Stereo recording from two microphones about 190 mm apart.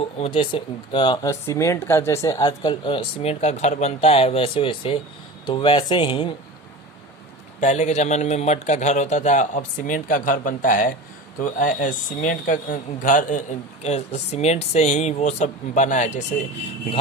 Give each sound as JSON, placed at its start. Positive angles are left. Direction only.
{"t": 0.0, "sound": "speech", "side_deg": 30}
{"t": 7.6, "sound": "a man's voice", "side_deg": 40}